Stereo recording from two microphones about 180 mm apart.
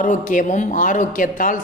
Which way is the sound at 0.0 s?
45° left (ahead or behind).